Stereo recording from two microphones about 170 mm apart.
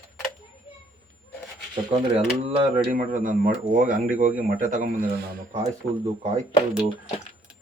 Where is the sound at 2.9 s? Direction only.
50° right (ahead or behind).